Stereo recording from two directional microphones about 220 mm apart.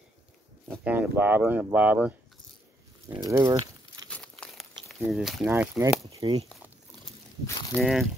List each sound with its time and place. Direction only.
0.7 s speech: 10° right (ahead or behind)
3.3 s speech: 15° right (ahead or behind)
4.1 s a sound: 5° left (ahead or behind)
5.0 s speech: 5° right (ahead or behind)
6.0 s speech: 20° right (ahead or behind)
7.4 s speech: 10° left (ahead or behind)
7.8 s speech: centre (ahead or behind)